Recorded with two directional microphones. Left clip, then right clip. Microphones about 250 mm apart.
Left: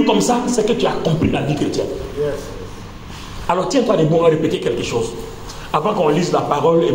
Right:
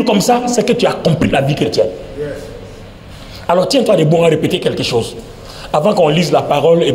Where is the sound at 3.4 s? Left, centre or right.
Right.